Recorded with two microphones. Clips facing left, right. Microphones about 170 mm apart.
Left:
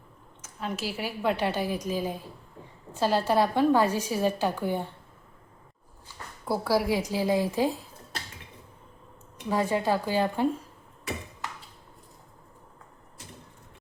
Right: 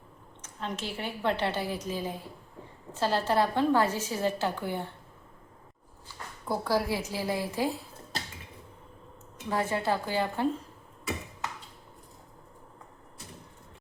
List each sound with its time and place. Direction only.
0.4 s a woman's voice: 10° left (ahead or behind)
6.4 s a woman's voice: 10° left (ahead or behind)
9.5 s a woman's voice: 15° left (ahead or behind)